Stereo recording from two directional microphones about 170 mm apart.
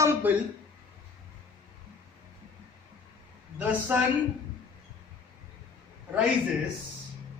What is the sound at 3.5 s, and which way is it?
Speech, 10° right (ahead or behind).